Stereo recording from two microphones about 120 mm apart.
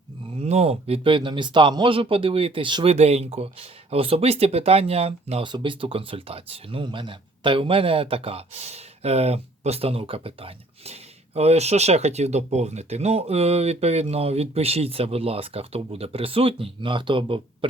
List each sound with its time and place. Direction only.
0.3 s speech: 60° right (ahead or behind); by 2.8 s 45° right (ahead or behind)
2.8 s speech: 60° right (ahead or behind)
5.5 s speech: 40° right (ahead or behind)
11.3 s speech: 65° right (ahead or behind); by 17.7 s 45° right (ahead or behind)